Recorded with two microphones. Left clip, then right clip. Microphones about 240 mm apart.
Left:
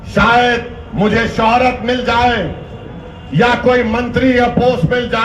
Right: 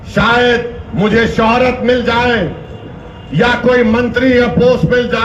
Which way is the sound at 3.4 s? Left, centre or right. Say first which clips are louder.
Right 1 dB; left.